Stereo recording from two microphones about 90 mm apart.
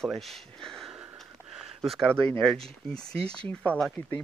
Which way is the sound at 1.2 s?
Centre (ahead or behind).